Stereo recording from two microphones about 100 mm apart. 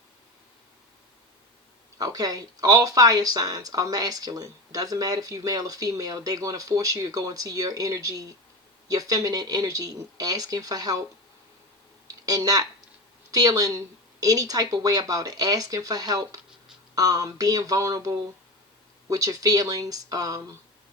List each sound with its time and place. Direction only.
2.0 s speech: 40° right (ahead or behind)
12.0 s speech: 40° right (ahead or behind)